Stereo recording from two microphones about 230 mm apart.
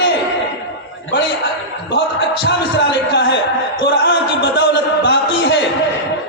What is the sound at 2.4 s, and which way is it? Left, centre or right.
Music, left.